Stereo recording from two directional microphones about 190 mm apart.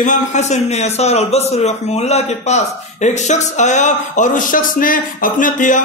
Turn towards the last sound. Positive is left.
turn(degrees=45)  # may be behind; listen again after turning